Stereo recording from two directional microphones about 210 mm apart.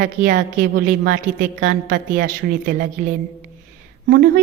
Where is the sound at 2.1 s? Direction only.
45° right (ahead or behind).